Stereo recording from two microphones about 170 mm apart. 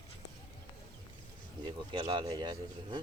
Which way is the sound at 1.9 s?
30° right (ahead or behind).